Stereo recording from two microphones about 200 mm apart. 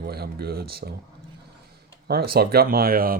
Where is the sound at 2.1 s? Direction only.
50° right (ahead or behind).